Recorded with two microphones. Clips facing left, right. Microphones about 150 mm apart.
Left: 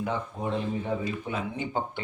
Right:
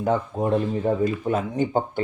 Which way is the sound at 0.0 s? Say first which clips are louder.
Right 8 dB; 45° right (ahead or behind).